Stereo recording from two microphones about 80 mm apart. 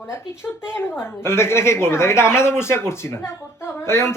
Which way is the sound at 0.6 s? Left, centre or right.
Left.